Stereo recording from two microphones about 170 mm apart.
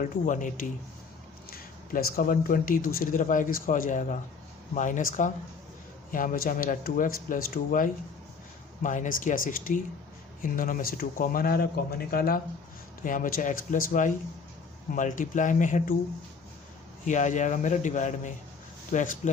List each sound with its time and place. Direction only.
0.0 s speech: 50° left (ahead or behind)
17.1 s speech: 45° left (ahead or behind)